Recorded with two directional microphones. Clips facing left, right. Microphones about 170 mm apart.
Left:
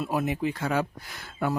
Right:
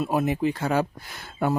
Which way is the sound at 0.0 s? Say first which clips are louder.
Right 4 dB; 25° right (ahead or behind).